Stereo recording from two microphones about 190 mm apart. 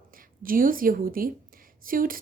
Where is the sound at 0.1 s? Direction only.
45° right (ahead or behind).